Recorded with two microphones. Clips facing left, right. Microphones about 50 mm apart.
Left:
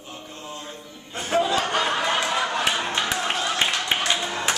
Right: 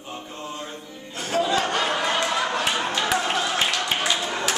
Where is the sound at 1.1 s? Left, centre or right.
Left.